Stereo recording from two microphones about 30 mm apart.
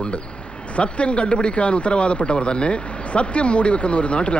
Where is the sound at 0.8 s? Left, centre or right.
Left.